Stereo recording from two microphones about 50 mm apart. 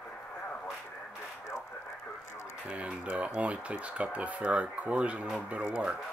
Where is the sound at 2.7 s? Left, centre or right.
Right.